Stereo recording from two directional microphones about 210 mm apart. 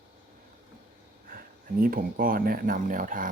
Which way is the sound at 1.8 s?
45° right (ahead or behind).